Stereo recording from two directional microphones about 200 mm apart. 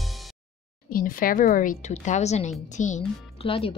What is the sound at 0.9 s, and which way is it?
Speech, 45° left (ahead or behind).